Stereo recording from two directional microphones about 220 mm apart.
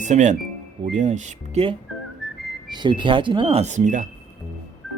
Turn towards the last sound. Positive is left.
turn(degrees=-35)  # may be behind; listen again after turning